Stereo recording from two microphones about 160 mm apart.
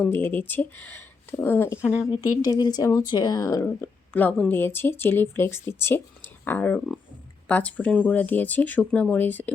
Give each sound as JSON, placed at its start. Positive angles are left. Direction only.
{"t": 0.0, "sound": "a woman's voice", "side_deg": 10}